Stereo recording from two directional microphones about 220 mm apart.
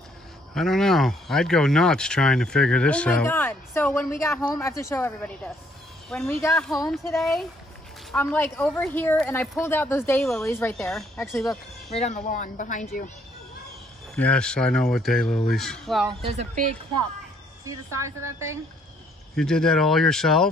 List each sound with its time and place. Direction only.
0.6 s a woman's voice: centre (ahead or behind)
11.9 s speech: 30° left (ahead or behind)
14.1 s speech: 5° left (ahead or behind)
16.1 s speech: 25° right (ahead or behind)
17.6 s a woman's voice: 15° right (ahead or behind)
19.3 s speech: 5° left (ahead or behind)